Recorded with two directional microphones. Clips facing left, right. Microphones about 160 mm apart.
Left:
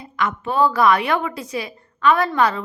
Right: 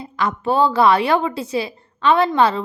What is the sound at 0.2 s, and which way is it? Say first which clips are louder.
A woman's voice: right 2 dB; 35° right (ahead or behind).